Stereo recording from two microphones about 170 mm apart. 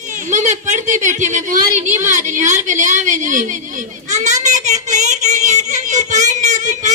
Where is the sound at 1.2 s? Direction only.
45° right (ahead or behind).